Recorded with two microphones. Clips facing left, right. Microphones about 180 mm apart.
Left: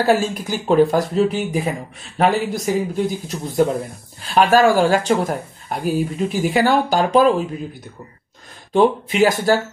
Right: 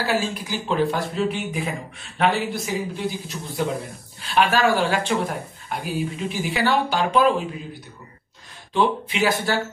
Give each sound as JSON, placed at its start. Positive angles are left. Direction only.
{"t": 0.0, "sound": "speech", "side_deg": 45}
{"t": 8.7, "sound": "speech", "side_deg": 45}